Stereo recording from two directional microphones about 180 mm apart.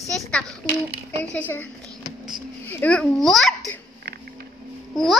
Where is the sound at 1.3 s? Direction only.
10° left (ahead or behind).